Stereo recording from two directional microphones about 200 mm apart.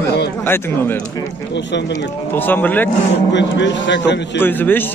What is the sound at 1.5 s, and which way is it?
Speech, 60° left (ahead or behind).